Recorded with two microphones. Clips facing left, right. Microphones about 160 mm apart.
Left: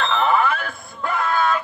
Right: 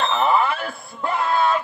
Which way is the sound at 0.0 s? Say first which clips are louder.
Even; 25° right (ahead or behind).